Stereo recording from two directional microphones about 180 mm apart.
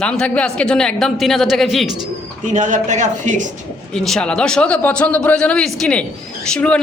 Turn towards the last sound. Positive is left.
turn(degrees=5)  # may be behind; listen again after turning